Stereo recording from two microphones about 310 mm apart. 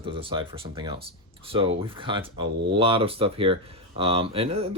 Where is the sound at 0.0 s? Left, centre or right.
Centre.